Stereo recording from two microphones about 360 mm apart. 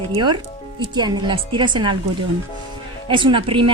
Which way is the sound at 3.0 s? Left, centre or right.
Centre.